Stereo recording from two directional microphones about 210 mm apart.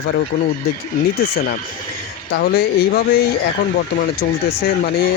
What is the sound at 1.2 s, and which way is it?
Speech, 45° left (ahead or behind).